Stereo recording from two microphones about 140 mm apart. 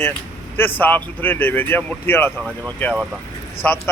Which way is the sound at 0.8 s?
15° left (ahead or behind).